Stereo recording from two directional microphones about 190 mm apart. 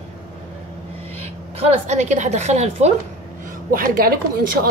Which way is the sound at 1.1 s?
30° right (ahead or behind).